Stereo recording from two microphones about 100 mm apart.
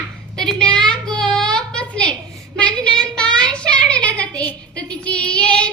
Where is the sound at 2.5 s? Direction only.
10° left (ahead or behind).